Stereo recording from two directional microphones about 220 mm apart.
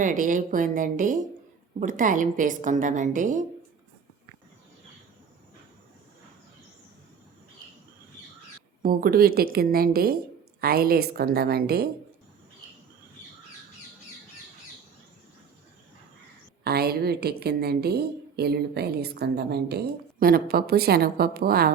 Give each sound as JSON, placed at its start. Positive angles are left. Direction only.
{"t": 0.0, "sound": "a woman's voice", "side_deg": -35}
{"t": 8.8, "sound": "a woman's voice", "side_deg": -40}
{"t": 16.6, "sound": "a woman's voice", "side_deg": -45}